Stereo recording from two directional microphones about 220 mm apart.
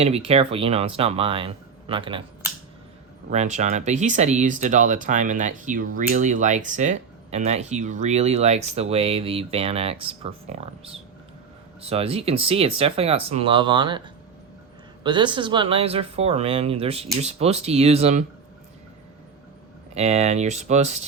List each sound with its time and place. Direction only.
0.0 s speech: 25° right (ahead or behind)
3.2 s speech: 30° right (ahead or behind)
15.0 s speech: 20° right (ahead or behind)
19.9 s speech: 30° right (ahead or behind)